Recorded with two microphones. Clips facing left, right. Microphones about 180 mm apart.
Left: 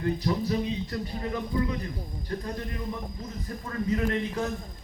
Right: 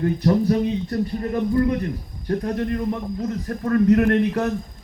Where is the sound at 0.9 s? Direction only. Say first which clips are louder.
Right 8 dB; 45° right (ahead or behind).